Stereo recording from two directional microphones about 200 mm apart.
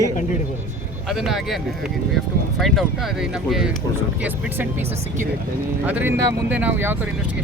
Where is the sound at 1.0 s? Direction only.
Centre (ahead or behind).